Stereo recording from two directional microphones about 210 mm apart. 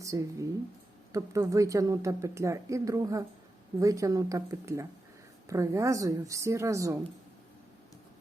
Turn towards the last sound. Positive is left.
turn(degrees=-15)  # may be behind; listen again after turning